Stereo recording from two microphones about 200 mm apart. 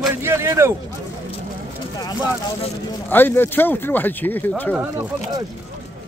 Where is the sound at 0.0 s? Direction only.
10° right (ahead or behind).